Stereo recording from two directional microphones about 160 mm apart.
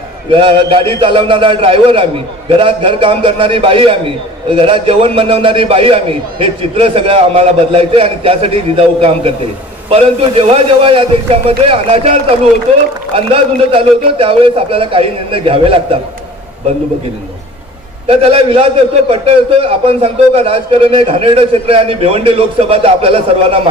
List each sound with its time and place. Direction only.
0.3 s a man's voice: 30° right (ahead or behind)
18.0 s a man's voice: 35° right (ahead or behind)